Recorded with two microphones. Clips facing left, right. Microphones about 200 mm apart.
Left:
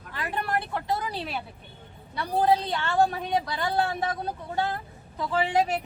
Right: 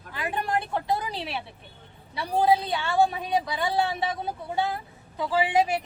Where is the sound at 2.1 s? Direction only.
10° right (ahead or behind).